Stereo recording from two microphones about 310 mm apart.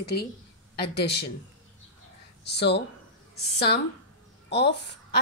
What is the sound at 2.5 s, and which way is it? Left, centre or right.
Speech, left.